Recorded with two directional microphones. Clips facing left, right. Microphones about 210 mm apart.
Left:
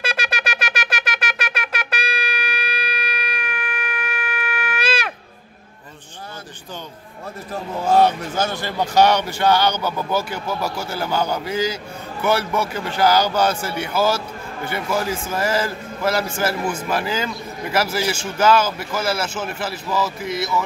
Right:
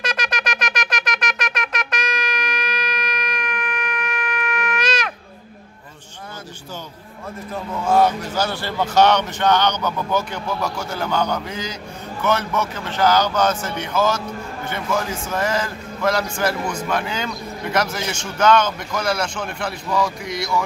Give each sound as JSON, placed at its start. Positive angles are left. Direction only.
{"t": 0.0, "sound": "shofar", "side_deg": 5}
{"t": 7.8, "sound": "a sound", "side_deg": 30}
{"t": 8.5, "sound": "speech", "side_deg": 15}